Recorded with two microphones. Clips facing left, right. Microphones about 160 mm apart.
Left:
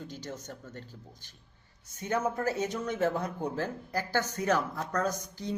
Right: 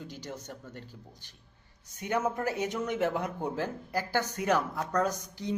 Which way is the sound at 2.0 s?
15° right (ahead or behind).